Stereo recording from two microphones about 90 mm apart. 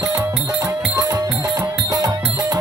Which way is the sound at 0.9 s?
45° right (ahead or behind).